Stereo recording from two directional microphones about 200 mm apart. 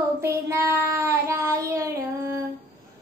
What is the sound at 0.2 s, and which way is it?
Child singing, 15° right (ahead or behind).